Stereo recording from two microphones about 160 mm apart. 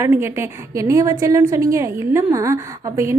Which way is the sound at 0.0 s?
15° right (ahead or behind).